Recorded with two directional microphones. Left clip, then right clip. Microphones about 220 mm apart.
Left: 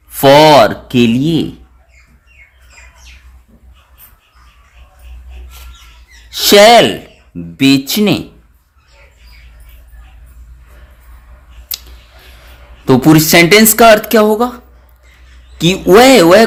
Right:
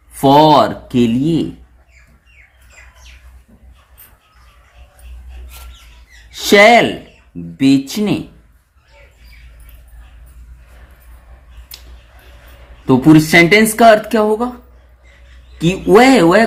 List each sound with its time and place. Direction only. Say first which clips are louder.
0.1 s a sound: left 4 dB; 40° left (ahead or behind)
6.3 s speech: left 3 dB; 35° left (ahead or behind)
11.7 s scissors: left 12 dB; 45° left (ahead or behind)
12.8 s speech: left 1 dB; 40° left (ahead or behind)
15.5 s speech: left 3 dB; 40° left (ahead or behind)